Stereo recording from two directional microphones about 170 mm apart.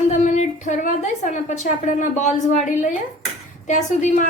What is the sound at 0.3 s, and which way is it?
A woman's voice, 45° left (ahead or behind).